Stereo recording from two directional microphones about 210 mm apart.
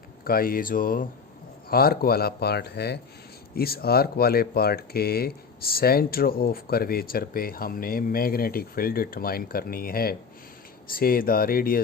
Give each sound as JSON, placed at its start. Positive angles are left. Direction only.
{"t": 0.3, "sound": "speech", "side_deg": 45}